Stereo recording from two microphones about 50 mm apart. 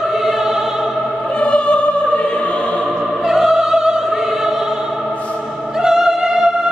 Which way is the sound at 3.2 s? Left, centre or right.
Centre.